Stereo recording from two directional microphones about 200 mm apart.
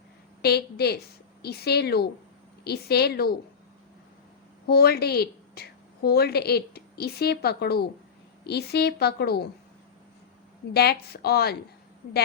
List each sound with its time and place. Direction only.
0.4 s a woman's voice: 55° left (ahead or behind)
4.6 s a woman's voice: 50° left (ahead or behind)
10.8 s a woman's voice: 55° left (ahead or behind)